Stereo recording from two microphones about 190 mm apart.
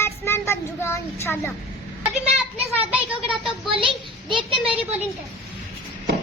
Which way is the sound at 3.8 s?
25° right (ahead or behind).